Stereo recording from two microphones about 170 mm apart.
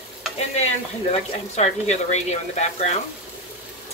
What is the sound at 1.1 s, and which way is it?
Speech, 40° left (ahead or behind).